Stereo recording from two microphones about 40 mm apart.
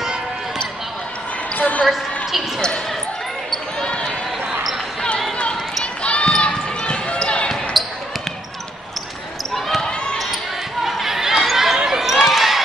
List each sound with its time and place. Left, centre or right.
1.6 s basketball bounce: left
3.8 s basketball bounce: left
6.0 s basketball bounce: left
7.8 s a sound: centre
10.8 s basketball bounce: centre
11.8 s run: centre